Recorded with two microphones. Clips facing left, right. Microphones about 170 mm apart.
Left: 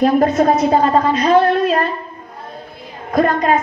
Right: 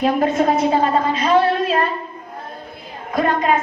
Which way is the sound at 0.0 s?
40° left (ahead or behind).